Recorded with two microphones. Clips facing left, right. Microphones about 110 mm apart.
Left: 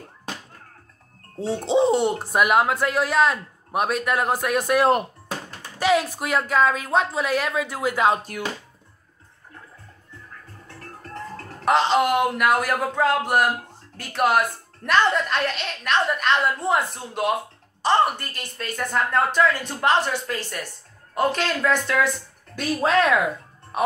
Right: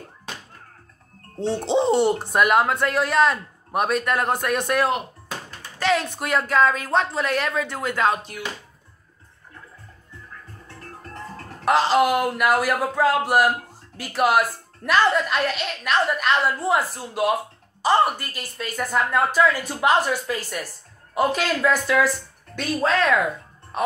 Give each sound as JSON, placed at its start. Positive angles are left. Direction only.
{"t": 1.4, "sound": "speech", "side_deg": 0}
{"t": 5.8, "sound": "speech", "side_deg": 10}
{"t": 8.2, "sound": "speech", "side_deg": 45}
{"t": 11.6, "sound": "speech", "side_deg": 0}
{"t": 22.6, "sound": "speech", "side_deg": 15}